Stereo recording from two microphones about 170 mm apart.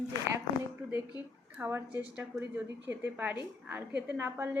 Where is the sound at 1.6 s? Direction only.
10° right (ahead or behind).